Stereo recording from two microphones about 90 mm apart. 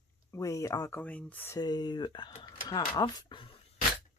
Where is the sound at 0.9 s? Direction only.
15° left (ahead or behind).